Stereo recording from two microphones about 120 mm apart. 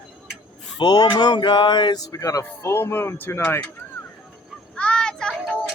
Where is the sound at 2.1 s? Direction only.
30° left (ahead or behind).